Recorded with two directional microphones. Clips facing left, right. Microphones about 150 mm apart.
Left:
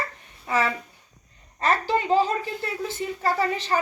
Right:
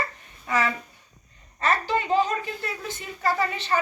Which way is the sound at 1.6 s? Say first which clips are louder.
Left 1 dB; 35° left (ahead or behind).